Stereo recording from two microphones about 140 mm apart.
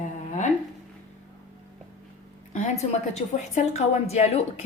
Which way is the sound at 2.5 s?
55° left (ahead or behind).